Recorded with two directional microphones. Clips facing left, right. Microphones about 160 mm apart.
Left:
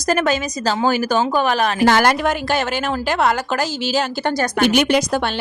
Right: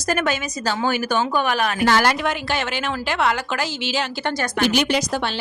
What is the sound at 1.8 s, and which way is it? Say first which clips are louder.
A woman's voice: left 3 dB; 50° left (ahead or behind).